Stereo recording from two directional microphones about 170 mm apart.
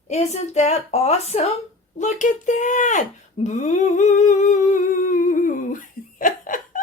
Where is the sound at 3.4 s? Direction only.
45° left (ahead or behind).